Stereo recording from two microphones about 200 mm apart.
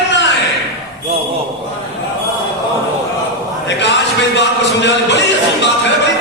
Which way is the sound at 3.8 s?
60° left (ahead or behind).